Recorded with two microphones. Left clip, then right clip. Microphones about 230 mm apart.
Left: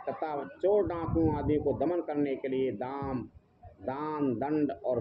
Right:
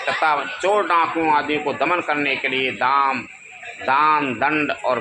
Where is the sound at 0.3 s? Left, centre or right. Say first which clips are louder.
Right 8 dB; right.